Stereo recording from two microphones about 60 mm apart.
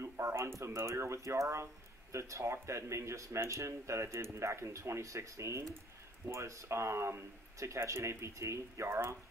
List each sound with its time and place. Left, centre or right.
0.0 s speech: right